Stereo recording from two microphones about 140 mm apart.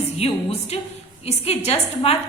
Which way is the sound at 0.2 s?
50° left (ahead or behind).